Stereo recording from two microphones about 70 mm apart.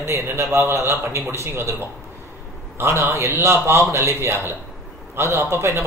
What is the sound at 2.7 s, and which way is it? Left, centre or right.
A man's voice, right.